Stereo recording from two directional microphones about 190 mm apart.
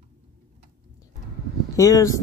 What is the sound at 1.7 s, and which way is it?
Speech, 15° left (ahead or behind).